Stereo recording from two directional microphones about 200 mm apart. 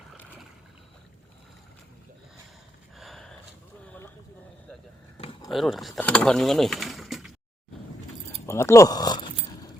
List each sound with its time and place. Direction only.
3.0 s a sound: centre (ahead or behind)
5.5 s speech: centre (ahead or behind)
8.4 s speech: 15° left (ahead or behind)